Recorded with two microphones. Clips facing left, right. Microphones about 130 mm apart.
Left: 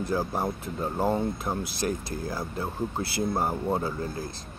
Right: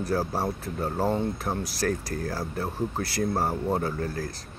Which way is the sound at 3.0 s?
25° left (ahead or behind).